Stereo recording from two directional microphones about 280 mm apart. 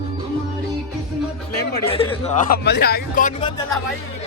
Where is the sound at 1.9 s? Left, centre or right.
Centre.